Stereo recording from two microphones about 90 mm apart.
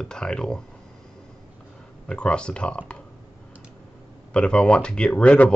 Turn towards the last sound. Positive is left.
turn(degrees=10)  # may be behind; listen again after turning